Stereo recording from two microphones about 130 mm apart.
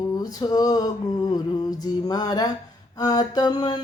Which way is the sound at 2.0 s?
30° left (ahead or behind).